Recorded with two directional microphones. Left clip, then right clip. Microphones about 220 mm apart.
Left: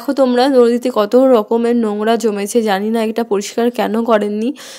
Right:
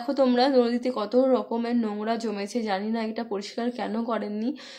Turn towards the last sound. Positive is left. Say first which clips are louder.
# left 15 dB
turn(degrees=35)  # may be behind; listen again after turning